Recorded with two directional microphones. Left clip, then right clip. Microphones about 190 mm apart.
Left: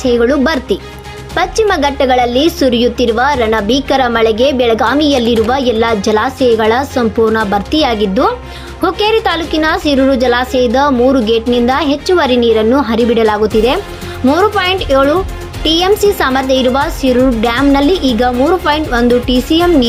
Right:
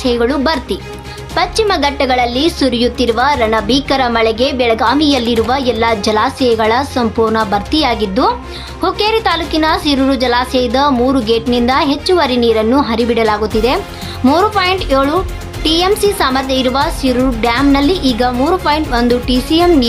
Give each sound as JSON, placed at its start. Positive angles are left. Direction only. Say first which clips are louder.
{"t": 0.0, "sound": "a woman's voice", "louder": "left 3 dB", "side_deg": 20}